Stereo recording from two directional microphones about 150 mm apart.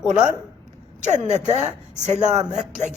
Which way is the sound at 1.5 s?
50° right (ahead or behind).